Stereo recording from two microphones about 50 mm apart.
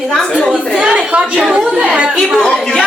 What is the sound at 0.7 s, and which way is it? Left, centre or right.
Speech, centre.